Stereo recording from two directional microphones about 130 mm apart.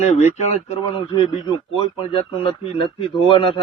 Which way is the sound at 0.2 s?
65° left (ahead or behind).